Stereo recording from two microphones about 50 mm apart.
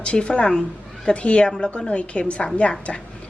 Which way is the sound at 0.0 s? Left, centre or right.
Left.